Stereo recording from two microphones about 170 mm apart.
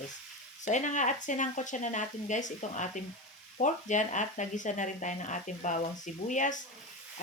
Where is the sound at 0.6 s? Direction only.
45° left (ahead or behind).